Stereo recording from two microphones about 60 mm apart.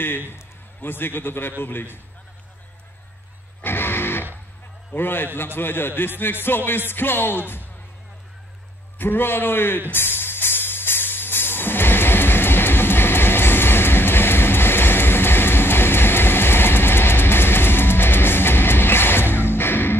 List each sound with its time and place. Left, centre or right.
0.3 s a man's voice: left
3.6 s music: left
4.9 s a man's voice: left
8.9 s a man's voice: left
9.9 s music: left